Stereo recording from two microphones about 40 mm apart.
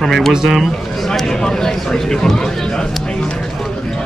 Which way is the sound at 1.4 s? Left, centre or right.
Centre.